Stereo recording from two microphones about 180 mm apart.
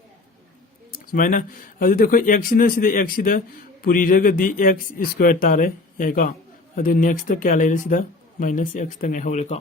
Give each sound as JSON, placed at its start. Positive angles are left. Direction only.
{"t": 1.1, "sound": "speech", "side_deg": 50}